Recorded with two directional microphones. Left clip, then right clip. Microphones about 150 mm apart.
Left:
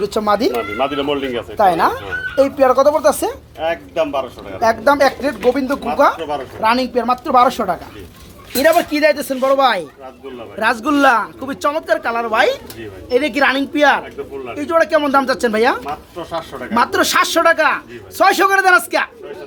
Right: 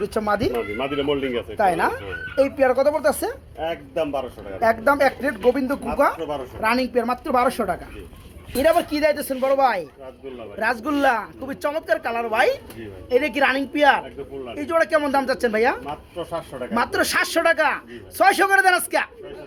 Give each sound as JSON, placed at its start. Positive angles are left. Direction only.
{"t": 0.0, "sound": "a woman's voice", "side_deg": 10}
{"t": 0.5, "sound": "speech", "side_deg": -30}
{"t": 1.5, "sound": "speech", "side_deg": 5}
{"t": 3.6, "sound": "speech", "side_deg": -40}
{"t": 4.6, "sound": "speech", "side_deg": -5}
{"t": 9.4, "sound": "a woman's voice", "side_deg": 10}